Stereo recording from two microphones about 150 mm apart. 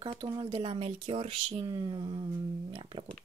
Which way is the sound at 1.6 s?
30° right (ahead or behind).